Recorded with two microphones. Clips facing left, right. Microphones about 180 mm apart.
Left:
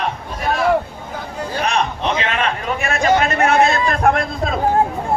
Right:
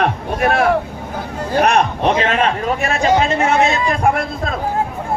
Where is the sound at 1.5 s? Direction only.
55° right (ahead or behind); by 3.1 s 35° right (ahead or behind).